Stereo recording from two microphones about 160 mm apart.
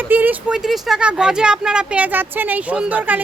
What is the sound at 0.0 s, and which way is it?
Speech, 10° right (ahead or behind).